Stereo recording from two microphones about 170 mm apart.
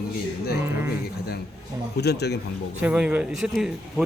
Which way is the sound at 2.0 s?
80° left.